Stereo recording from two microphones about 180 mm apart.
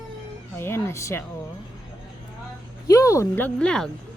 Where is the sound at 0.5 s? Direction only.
15° left (ahead or behind).